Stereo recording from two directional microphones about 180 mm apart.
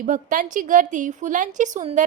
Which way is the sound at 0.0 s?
45° right (ahead or behind).